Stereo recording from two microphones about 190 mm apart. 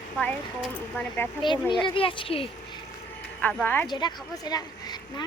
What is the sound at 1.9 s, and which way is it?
Speech, 25° left (ahead or behind).